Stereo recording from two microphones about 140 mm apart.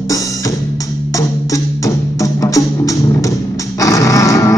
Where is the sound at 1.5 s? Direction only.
25° left (ahead or behind).